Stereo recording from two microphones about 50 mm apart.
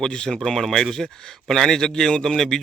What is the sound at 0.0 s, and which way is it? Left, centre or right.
Speech, centre.